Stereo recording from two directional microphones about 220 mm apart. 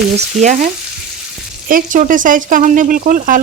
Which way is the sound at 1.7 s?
40° right (ahead or behind).